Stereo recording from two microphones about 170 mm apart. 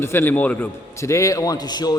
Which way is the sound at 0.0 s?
15° left (ahead or behind).